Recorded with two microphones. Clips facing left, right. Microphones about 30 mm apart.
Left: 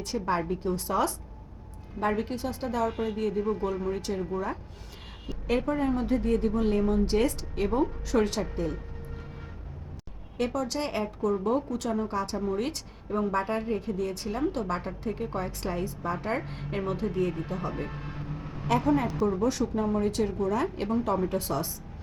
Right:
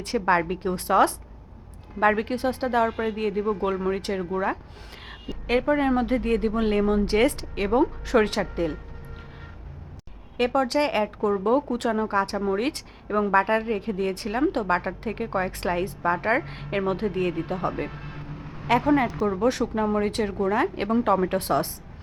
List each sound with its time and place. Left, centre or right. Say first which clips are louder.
0.0 s speech: right 6 dB; right
10.3 s speech: right 7 dB; right
17.9 s vehicle: even; centre
19.2 s speech: right 3 dB; right